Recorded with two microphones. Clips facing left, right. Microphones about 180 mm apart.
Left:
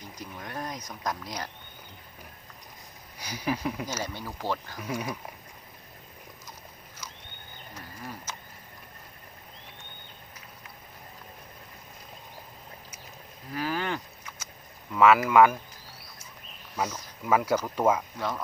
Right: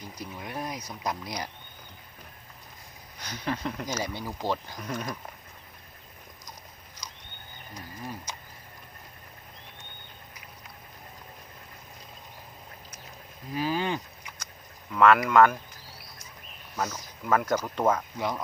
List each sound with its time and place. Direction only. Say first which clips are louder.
0.2 s speech: right 1 dB; 10° right (ahead or behind)
3.2 s speech: left 2 dB; 10° left (ahead or behind)
4.0 s speech: right 2 dB; 15° right (ahead or behind)
4.8 s speech: left 1 dB; 10° left (ahead or behind)
7.0 s a sound: even; 15° right (ahead or behind)
13.5 s cattle: right 2 dB; 15° right (ahead or behind)
14.9 s speech: even; 5° left (ahead or behind)
16.7 s speech: left 1 dB; 10° left (ahead or behind)